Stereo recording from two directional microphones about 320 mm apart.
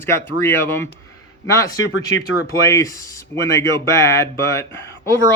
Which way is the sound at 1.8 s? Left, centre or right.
Left.